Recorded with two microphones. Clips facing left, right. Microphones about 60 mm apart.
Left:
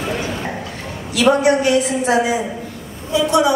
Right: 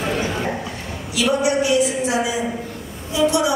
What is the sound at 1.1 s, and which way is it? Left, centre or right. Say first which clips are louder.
A woman's voice: left 5 dB; left.